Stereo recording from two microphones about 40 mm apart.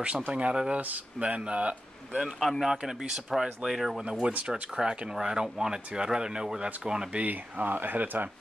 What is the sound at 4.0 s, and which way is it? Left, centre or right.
Speech, right.